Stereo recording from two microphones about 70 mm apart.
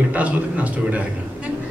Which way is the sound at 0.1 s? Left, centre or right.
Right.